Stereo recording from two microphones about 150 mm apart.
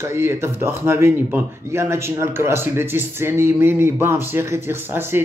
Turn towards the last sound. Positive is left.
turn(degrees=-15)  # may be behind; listen again after turning